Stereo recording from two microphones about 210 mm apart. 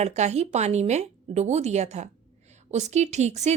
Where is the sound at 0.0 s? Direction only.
30° right (ahead or behind).